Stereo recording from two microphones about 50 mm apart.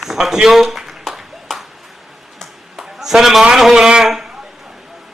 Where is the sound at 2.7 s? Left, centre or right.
Centre.